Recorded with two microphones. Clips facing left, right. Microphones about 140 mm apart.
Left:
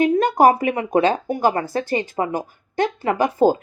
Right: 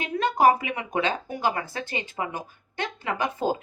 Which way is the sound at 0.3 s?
40° left (ahead or behind).